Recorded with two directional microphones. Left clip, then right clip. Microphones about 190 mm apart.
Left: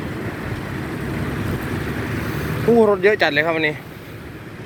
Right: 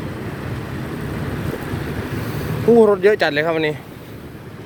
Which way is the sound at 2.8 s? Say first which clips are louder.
Right 1 dB; 30° right (ahead or behind).